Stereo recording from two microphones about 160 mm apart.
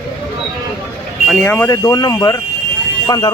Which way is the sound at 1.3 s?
10° left (ahead or behind).